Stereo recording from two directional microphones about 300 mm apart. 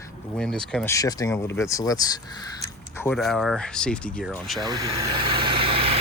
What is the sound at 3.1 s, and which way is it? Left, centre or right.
Speech, centre.